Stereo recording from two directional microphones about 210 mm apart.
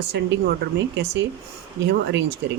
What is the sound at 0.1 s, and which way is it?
Speech, 55° right (ahead or behind).